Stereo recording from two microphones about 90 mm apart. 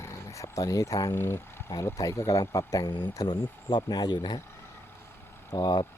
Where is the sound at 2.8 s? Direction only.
55° left (ahead or behind).